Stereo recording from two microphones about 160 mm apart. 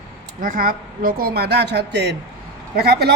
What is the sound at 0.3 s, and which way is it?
A woman's voice, 60° right (ahead or behind).